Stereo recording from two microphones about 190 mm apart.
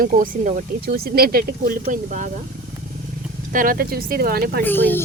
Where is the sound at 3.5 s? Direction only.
50° right (ahead or behind).